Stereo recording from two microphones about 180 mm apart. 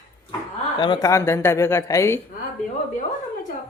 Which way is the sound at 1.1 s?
15° left (ahead or behind).